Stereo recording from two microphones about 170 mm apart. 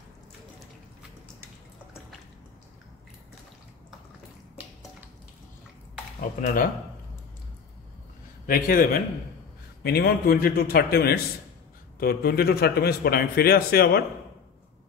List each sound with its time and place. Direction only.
6.4 s speech: 55° left (ahead or behind)
8.5 s a man's voice: 55° left (ahead or behind)